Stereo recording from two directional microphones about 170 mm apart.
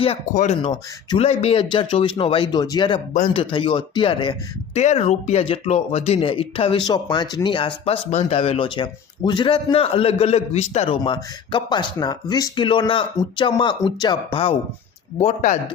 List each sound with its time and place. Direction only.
0.6 s speech: 30° left (ahead or behind)
3.1 s speech: 45° left (ahead or behind)
3.5 s speech: 30° left (ahead or behind)
4.8 s speech: 40° left (ahead or behind)
15.2 s speech: 45° left (ahead or behind)